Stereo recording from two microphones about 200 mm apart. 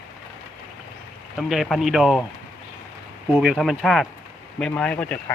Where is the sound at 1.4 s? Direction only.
Centre (ahead or behind).